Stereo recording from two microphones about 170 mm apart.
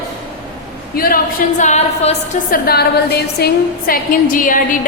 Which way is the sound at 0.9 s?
60° left (ahead or behind).